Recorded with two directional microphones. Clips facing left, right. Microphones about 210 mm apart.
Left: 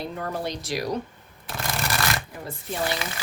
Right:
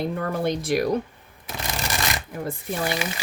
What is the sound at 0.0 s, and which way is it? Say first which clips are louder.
Speech: right 5 dB; 55° right (ahead or behind).